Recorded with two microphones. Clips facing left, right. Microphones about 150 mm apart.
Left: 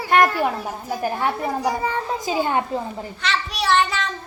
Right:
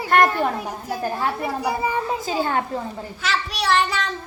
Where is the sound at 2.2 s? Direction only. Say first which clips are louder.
Left 1 dB; 15° left (ahead or behind).